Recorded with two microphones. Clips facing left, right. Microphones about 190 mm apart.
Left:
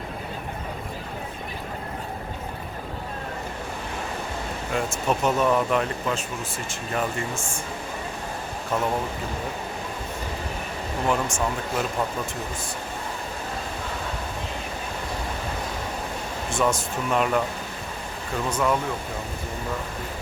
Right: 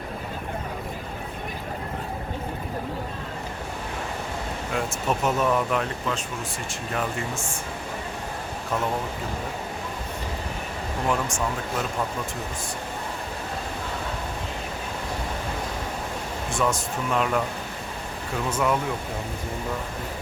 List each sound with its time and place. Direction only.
4.7 s speech: centre (ahead or behind)
11.1 s speech: centre (ahead or behind)
16.5 s speech: centre (ahead or behind)
18.4 s speech: 5° right (ahead or behind)